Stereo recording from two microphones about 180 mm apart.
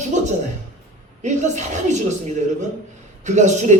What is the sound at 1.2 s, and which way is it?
Speech, 40° right (ahead or behind).